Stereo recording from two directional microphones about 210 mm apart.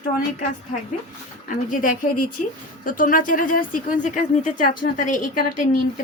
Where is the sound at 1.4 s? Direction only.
40° left (ahead or behind).